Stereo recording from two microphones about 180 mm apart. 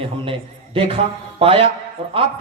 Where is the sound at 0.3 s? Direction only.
30° right (ahead or behind).